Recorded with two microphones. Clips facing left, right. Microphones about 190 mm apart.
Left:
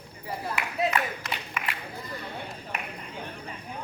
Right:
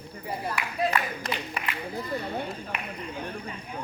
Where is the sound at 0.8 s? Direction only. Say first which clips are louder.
Right 1 dB; 35° right (ahead or behind).